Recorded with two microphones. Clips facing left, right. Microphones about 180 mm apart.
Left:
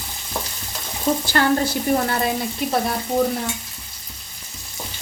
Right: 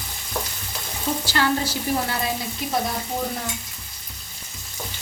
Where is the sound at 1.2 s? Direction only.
55° left (ahead or behind).